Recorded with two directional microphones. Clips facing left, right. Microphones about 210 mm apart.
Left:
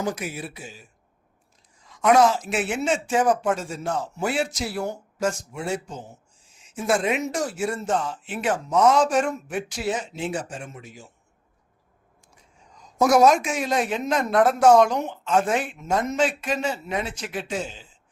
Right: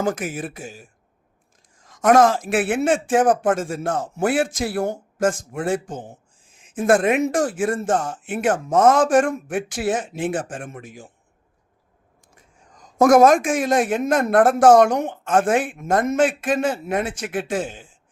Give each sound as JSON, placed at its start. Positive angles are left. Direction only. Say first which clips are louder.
{"t": 0.0, "sound": "speech", "louder": "right 5 dB", "side_deg": -50}
{"t": 12.3, "sound": "speech", "louder": "right 1 dB", "side_deg": -50}